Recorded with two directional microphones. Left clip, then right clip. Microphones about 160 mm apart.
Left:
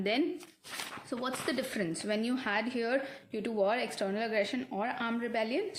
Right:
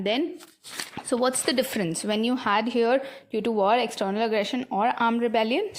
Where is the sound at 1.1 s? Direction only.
60° right (ahead or behind).